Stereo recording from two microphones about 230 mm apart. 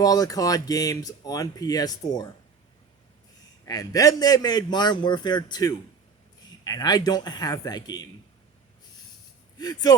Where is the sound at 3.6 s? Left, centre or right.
Centre.